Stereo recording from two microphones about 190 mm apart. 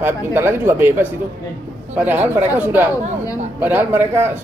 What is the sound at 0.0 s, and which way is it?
Speech, 10° right (ahead or behind).